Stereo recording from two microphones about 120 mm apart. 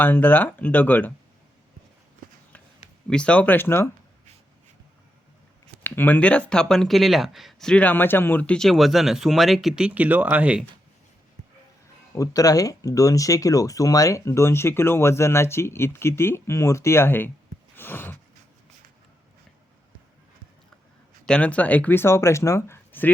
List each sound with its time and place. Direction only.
0.0 s speech: 15° left (ahead or behind)
2.2 s run: 90° right
3.1 s speech: 10° left (ahead or behind)
5.8 s speech: 15° left (ahead or behind); by 10.6 s 15° right (ahead or behind)
12.1 s speech: 30° left (ahead or behind)
17.7 s a sound: 15° left (ahead or behind)
21.2 s speech: 10° left (ahead or behind)